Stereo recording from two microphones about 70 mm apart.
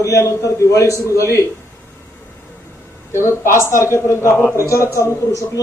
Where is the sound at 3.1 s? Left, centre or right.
Left.